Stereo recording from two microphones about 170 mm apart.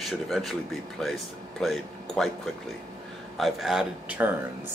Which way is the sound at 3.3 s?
Centre (ahead or behind).